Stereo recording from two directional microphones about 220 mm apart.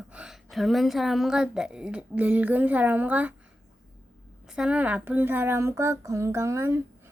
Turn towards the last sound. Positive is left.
turn(degrees=-10)  # may be behind; listen again after turning